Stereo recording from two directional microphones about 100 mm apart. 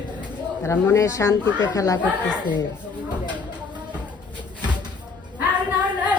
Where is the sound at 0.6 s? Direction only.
30° left (ahead or behind).